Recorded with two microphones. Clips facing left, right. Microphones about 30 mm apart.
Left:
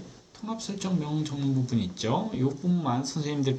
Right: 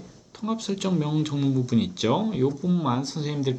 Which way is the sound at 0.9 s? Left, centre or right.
Right.